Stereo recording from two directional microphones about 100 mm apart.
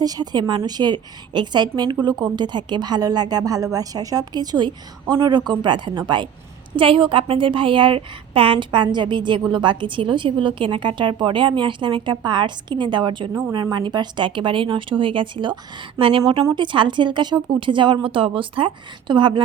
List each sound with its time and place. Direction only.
0.0 s a woman's voice: 40° right (ahead or behind)
6.7 s a woman's voice: 60° right (ahead or behind)
16.0 s speech: 70° right (ahead or behind)
16.6 s speech: 55° right (ahead or behind)